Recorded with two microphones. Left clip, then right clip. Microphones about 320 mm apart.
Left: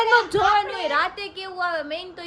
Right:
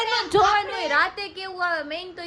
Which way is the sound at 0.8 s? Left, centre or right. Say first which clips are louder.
Right 1 dB; centre.